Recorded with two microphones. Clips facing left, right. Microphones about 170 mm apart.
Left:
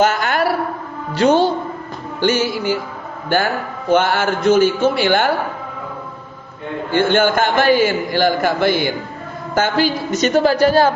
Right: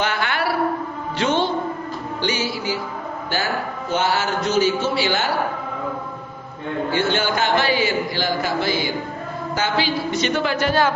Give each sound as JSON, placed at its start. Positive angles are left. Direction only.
{"t": 0.0, "sound": "a sound", "side_deg": 45}
{"t": 1.2, "sound": "a woman's voice", "side_deg": 40}
{"t": 2.2, "sound": "a man's voice", "side_deg": 50}
{"t": 6.9, "sound": "a man's voice", "side_deg": 50}